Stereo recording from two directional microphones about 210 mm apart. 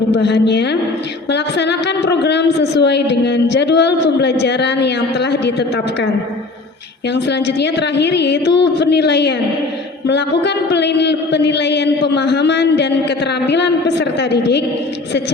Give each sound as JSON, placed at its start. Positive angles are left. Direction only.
{"t": 0.1, "sound": "a man's voice", "side_deg": 55}
{"t": 7.1, "sound": "a man's voice", "side_deg": 55}